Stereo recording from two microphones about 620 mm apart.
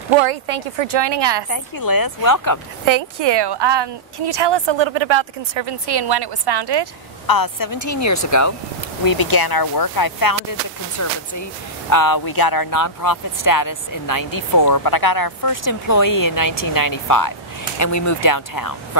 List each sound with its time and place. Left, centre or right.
0.7 s a woman's voice: right
1.5 s speech: left
2.8 s a woman's voice: right
7.2 s speech: left